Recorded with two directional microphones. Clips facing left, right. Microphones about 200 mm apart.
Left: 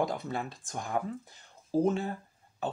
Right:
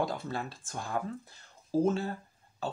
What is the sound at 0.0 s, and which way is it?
Speech, 20° left (ahead or behind).